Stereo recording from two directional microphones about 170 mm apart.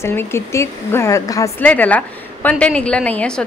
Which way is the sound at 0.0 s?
15° left (ahead or behind).